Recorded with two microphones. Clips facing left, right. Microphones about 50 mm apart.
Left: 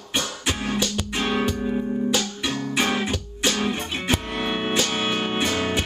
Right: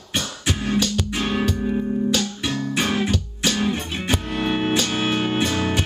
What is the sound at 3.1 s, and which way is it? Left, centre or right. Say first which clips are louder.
Music: right 1 dB; left.